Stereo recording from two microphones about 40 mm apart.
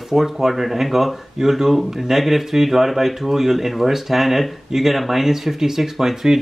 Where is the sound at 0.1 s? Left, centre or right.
Centre.